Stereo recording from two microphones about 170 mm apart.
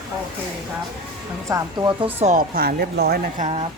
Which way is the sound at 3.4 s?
40° right (ahead or behind).